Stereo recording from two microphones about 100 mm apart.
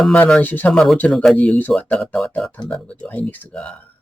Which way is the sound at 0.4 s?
15° left (ahead or behind).